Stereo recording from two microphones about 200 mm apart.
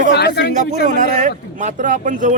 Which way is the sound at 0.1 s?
55° left (ahead or behind).